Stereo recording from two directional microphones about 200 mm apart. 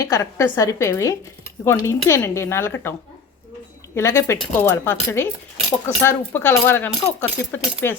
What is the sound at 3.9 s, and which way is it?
A woman's voice, 15° left (ahead or behind).